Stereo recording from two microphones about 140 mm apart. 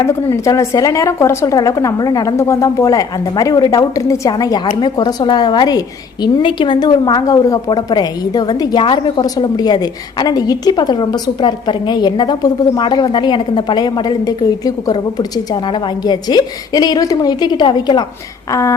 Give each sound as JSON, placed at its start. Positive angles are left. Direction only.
{"t": 0.0, "sound": "a woman's voice", "side_deg": 20}